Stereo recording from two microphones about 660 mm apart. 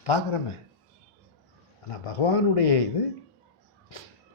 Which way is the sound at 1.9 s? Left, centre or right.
Left.